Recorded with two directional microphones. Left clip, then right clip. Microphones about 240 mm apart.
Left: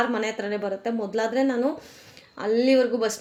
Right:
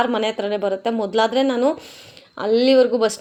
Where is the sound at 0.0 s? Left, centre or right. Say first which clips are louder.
Right 5 dB; right.